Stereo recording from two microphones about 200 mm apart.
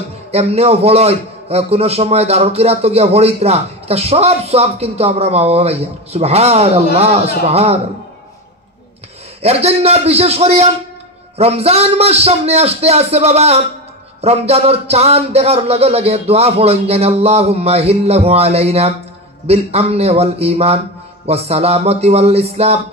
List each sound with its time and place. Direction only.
0.3 s a man's voice: 30° right (ahead or behind)
9.4 s a man's voice: 30° right (ahead or behind)